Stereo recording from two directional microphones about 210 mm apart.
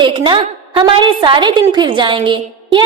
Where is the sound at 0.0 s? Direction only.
20° right (ahead or behind).